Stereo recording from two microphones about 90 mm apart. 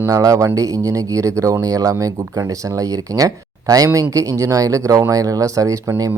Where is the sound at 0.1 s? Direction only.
40° right (ahead or behind).